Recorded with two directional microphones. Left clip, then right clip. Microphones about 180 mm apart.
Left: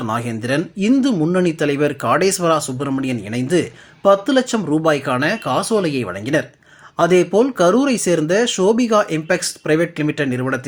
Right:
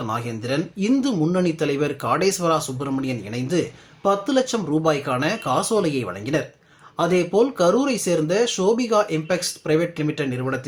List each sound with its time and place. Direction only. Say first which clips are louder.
0.0 s speech: left 4 dB; 30° left (ahead or behind)